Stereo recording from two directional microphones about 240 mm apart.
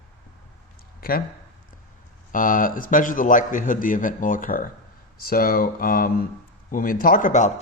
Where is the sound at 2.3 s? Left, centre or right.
Left.